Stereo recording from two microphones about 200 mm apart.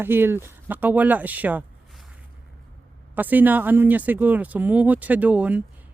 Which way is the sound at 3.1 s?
10° right (ahead or behind).